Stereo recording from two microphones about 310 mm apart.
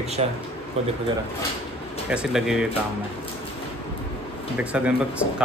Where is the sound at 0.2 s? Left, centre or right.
Centre.